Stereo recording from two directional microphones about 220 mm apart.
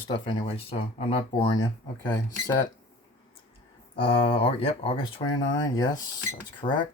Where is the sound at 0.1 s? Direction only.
20° left (ahead or behind).